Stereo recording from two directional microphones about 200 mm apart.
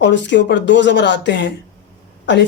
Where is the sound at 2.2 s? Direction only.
60° left (ahead or behind).